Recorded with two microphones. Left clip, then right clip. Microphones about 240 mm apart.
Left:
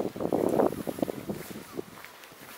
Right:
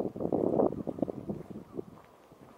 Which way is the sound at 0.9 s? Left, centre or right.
Right.